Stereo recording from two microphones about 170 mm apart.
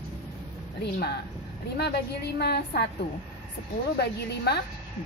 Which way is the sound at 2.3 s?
70° left (ahead or behind).